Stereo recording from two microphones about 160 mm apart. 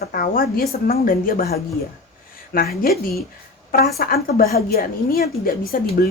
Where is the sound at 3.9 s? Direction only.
70° left (ahead or behind).